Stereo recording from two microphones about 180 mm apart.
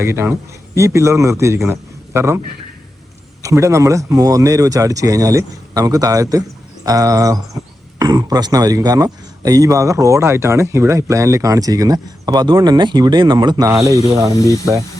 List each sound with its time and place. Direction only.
0.0 s a man's voice: 15° right (ahead or behind)
3.4 s a man's voice: 15° right (ahead or behind)
14.3 s speech: 20° left (ahead or behind)